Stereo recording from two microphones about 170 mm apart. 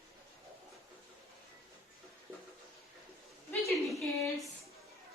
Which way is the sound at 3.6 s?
Centre (ahead or behind).